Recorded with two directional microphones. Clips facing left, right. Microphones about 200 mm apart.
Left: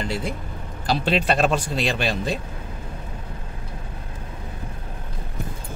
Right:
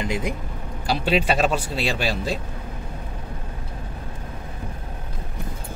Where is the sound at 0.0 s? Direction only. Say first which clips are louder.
Right 1 dB; 15° right (ahead or behind).